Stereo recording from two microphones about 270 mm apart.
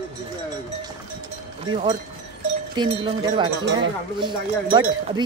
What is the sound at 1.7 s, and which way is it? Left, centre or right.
Speech, centre.